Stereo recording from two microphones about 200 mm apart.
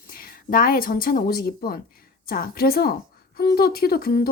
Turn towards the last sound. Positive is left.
turn(degrees=50)  # may be behind; listen again after turning